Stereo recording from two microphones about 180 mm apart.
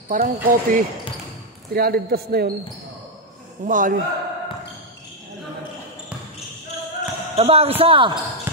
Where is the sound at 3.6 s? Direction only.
45° right (ahead or behind).